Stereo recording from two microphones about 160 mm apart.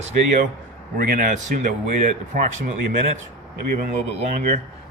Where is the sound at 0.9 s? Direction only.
65° right (ahead or behind).